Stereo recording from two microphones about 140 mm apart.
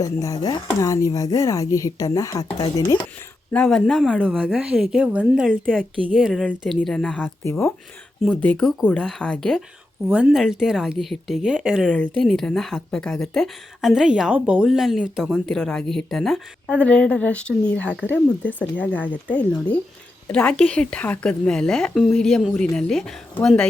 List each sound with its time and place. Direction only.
0.0 s speech: 25° left (ahead or behind)
3.5 s speech: 5° left (ahead or behind)
4.2 s speech: 10° right (ahead or behind); by 7.3 s 5° left (ahead or behind)
8.4 s speech: 10° left (ahead or behind)
10.1 s speech: 10° right (ahead or behind)
11.9 s speech: 5° left (ahead or behind)